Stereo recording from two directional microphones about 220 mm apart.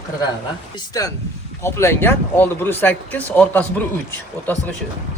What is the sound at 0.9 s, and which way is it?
Speech, 15° left (ahead or behind).